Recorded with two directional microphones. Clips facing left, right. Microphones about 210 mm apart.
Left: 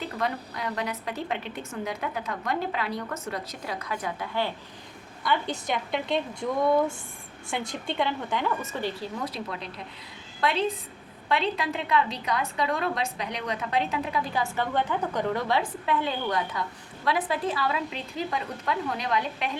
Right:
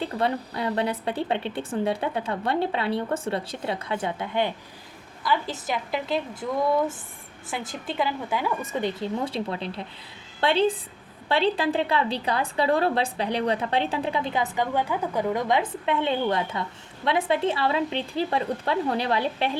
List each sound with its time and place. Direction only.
0.0 s a woman's voice: 30° right (ahead or behind)
5.2 s a woman's voice: centre (ahead or behind); by 19.5 s 30° right (ahead or behind)